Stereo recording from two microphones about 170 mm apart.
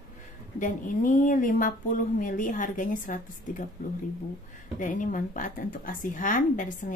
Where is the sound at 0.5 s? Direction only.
50° left (ahead or behind).